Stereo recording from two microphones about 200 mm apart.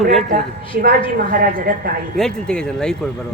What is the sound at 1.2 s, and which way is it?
Speech, 45° right (ahead or behind).